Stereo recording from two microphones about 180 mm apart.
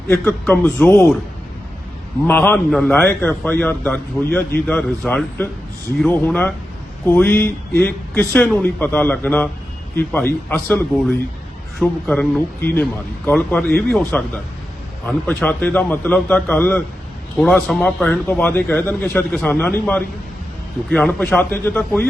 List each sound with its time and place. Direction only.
0.1 s a man's voice: 10° left (ahead or behind)
2.2 s a man's voice: 10° left (ahead or behind)